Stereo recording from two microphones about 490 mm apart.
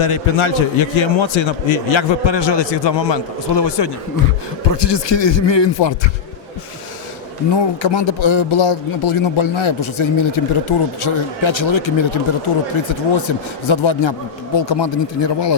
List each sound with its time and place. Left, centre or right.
0.0 s a man's voice: left
7.5 s a man's voice: left